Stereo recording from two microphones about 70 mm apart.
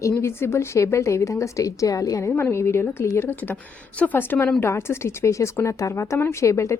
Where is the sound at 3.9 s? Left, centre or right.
Left.